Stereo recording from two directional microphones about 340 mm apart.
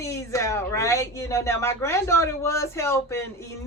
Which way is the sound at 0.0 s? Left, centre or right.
Centre.